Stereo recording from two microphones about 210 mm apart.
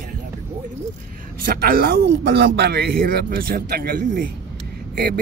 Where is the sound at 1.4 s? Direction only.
45° right (ahead or behind).